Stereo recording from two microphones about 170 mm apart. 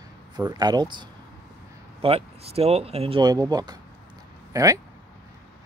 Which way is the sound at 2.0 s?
35° right (ahead or behind).